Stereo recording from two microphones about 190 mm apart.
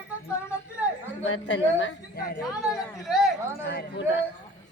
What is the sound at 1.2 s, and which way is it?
A woman's voice, 75° left (ahead or behind).